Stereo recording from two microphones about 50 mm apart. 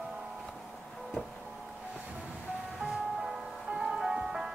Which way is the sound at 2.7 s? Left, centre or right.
Centre.